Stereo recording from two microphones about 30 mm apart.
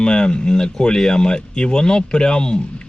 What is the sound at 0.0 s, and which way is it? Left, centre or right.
Speech, left.